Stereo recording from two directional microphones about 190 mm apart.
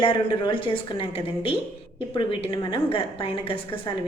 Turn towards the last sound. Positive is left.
turn(degrees=25)  # may be behind; listen again after turning